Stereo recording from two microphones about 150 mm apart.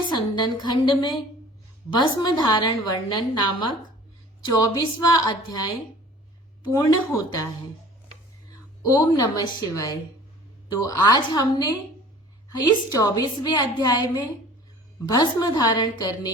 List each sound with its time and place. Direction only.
0.1 s a woman's voice: 30° left (ahead or behind)
6.7 s a woman's voice: 25° left (ahead or behind)
8.8 s a woman's voice: 25° left (ahead or behind)